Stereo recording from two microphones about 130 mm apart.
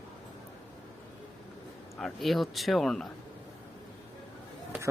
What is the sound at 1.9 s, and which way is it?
Speech, centre (ahead or behind).